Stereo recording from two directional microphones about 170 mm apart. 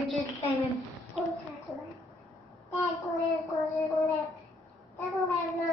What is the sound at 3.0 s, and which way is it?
Child singing, 20° left (ahead or behind).